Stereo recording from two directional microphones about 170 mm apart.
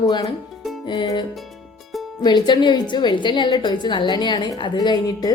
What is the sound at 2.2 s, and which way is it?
A woman's voice, 25° left (ahead or behind).